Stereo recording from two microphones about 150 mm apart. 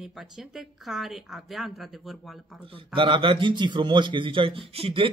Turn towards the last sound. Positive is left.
turn(degrees=-35)  # may be behind; listen again after turning